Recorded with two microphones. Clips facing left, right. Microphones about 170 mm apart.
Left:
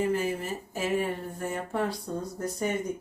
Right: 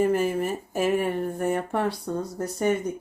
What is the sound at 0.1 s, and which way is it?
Speech, 55° right (ahead or behind).